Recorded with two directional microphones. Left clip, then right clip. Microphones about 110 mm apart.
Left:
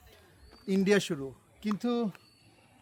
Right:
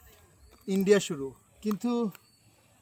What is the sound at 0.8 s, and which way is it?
Speech, 20° left (ahead or behind).